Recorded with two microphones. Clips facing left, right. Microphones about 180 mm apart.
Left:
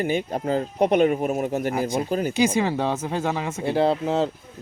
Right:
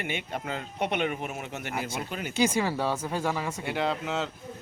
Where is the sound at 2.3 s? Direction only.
20° left (ahead or behind).